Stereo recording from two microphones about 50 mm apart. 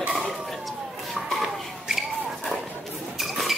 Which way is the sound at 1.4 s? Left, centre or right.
Centre.